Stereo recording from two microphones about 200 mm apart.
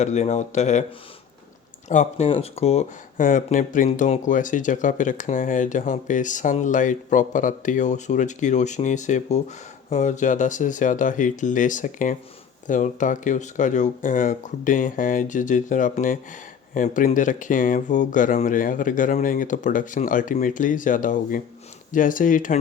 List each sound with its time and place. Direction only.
0.0 s speech: 35° left (ahead or behind)
1.9 s speech: 35° left (ahead or behind)